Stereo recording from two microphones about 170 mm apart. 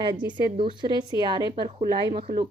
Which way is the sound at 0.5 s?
30° right (ahead or behind).